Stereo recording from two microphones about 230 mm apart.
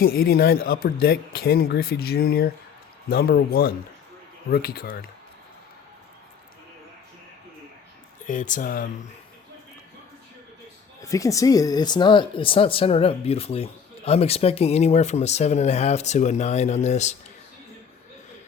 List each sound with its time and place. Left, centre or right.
0.0 s speech: left
8.2 s speech: left
11.0 s speech: centre; by 17.2 s left